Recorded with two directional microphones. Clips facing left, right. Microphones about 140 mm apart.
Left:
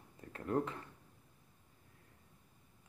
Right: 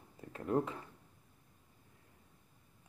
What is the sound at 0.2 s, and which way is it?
Speech, 15° right (ahead or behind).